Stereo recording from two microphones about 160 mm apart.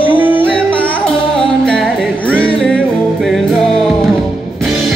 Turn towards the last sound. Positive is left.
turn(degrees=0)  # may be behind; listen again after turning